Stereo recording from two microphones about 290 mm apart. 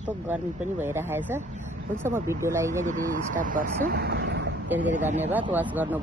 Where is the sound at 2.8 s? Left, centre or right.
Right.